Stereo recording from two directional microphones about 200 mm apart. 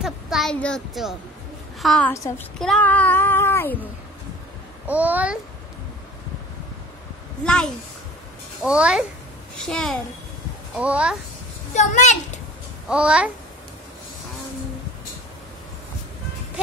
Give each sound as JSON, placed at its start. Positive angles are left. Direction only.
{"t": 0.0, "sound": "a child's voice", "side_deg": 0}
{"t": 2.1, "sound": "a child's voice", "side_deg": 15}
{"t": 2.6, "sound": "child singing", "side_deg": 5}
{"t": 4.8, "sound": "a child's voice", "side_deg": -10}
{"t": 7.4, "sound": "a child's voice", "side_deg": 5}
{"t": 11.7, "sound": "a child's voice", "side_deg": 35}
{"t": 12.8, "sound": "a child's voice", "side_deg": -5}